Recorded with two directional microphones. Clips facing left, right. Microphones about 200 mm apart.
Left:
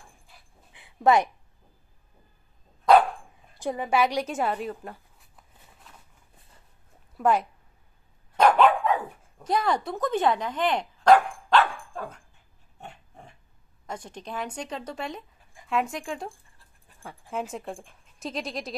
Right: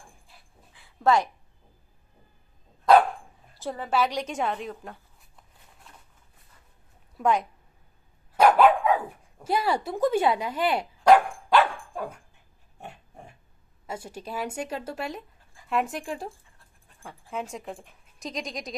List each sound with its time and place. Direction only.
0.7 s a sound: 20° left (ahead or behind)
3.5 s a sound: 15° left (ahead or behind)
7.2 s speech: 5° left (ahead or behind)
8.3 s dog: 10° right (ahead or behind)
12.8 s pig: 10° right (ahead or behind)
13.8 s a woman's voice: 10° right (ahead or behind)
17.0 s dog: 10° left (ahead or behind)
17.3 s speech: centre (ahead or behind)